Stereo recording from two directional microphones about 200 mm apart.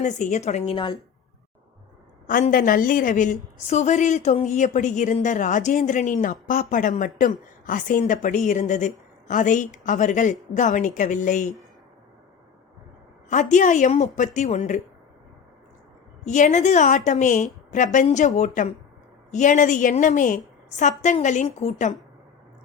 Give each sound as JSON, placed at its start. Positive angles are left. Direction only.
{"t": 0.0, "sound": "a woman's voice", "side_deg": 40}
{"t": 2.2, "sound": "a woman's voice", "side_deg": 40}
{"t": 13.3, "sound": "a woman's voice", "side_deg": 40}
{"t": 16.2, "sound": "a woman's voice", "side_deg": 35}